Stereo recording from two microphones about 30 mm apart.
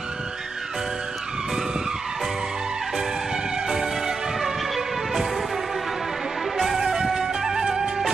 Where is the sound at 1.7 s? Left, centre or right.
Centre.